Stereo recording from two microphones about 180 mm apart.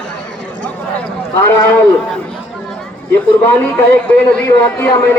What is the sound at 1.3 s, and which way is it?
Speech, 15° left (ahead or behind).